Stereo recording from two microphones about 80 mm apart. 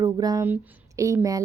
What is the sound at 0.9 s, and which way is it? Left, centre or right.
Speech, right.